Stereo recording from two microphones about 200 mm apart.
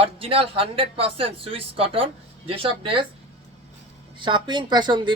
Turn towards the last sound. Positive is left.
turn(degrees=-20)  # may be behind; listen again after turning